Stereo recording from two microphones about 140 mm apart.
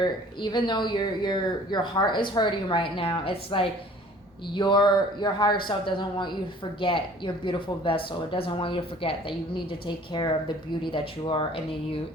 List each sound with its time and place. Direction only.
0.0 s speech: 35° left (ahead or behind)